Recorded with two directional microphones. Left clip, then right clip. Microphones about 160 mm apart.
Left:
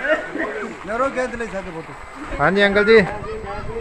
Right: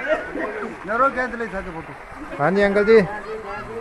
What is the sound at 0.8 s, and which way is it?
Speech, 30° left (ahead or behind).